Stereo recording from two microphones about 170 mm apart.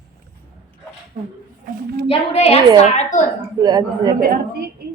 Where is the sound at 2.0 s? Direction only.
35° left (ahead or behind).